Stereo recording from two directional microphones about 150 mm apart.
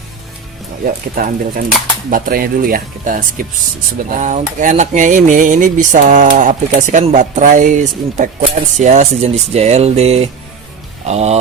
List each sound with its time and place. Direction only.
1.1 s speech: 70° right (ahead or behind); by 11.3 s 45° right (ahead or behind)